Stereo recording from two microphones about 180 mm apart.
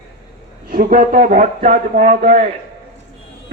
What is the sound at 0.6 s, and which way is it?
A man's voice, 55° right (ahead or behind).